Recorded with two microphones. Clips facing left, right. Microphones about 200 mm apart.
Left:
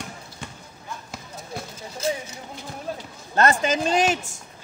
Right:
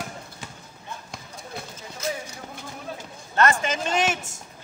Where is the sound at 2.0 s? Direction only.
30° left (ahead or behind).